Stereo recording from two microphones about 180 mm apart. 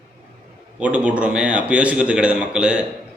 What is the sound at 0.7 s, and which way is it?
A man's voice, 5° right (ahead or behind).